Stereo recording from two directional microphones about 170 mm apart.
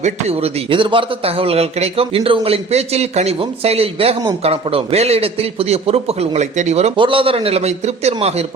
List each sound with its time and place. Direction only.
0.0 s a man's voice: 35° right (ahead or behind)